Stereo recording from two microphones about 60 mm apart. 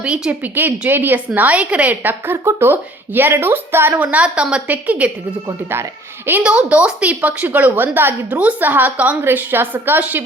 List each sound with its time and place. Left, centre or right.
0.0 s speech: centre
0.4 s a woman's voice: right
1.4 s a woman's voice: right
6.4 s speech: centre; by 8.1 s right
8.3 s a woman's voice: right